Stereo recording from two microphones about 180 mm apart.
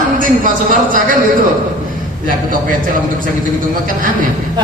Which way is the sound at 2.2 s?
50° right (ahead or behind).